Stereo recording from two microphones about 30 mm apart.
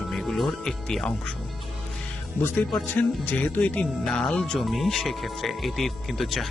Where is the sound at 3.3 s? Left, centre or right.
Left.